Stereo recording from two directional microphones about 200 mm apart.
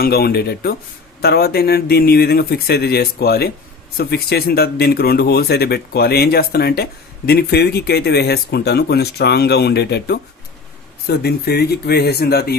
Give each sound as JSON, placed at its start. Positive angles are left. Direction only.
{"t": 0.0, "sound": "speech", "side_deg": 50}